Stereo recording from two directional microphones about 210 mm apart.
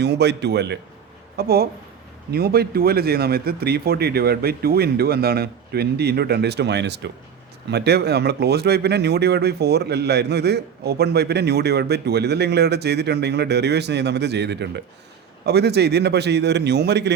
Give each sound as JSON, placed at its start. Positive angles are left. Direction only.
{"t": 0.0, "sound": "speech", "side_deg": -55}